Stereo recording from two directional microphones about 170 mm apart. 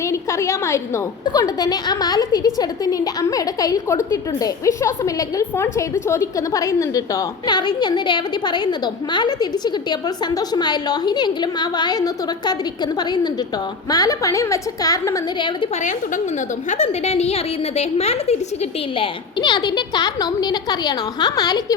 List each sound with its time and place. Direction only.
0.0 s a woman's voice: 15° left (ahead or behind)
15.8 s a woman's voice: 45° left (ahead or behind)
18.9 s a woman's voice: 25° left (ahead or behind)